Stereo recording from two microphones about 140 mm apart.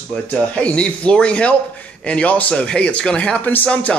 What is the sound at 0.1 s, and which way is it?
A man's voice, 10° left (ahead or behind).